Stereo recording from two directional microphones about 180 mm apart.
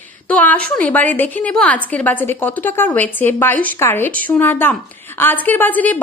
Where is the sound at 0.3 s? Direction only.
10° left (ahead or behind).